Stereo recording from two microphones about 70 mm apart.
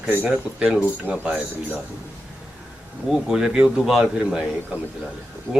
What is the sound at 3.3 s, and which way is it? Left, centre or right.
Speech, centre.